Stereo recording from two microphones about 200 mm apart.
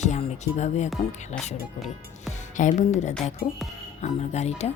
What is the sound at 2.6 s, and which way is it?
Speech, 40° left (ahead or behind).